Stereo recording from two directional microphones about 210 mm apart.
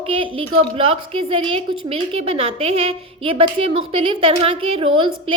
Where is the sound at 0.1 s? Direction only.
25° right (ahead or behind).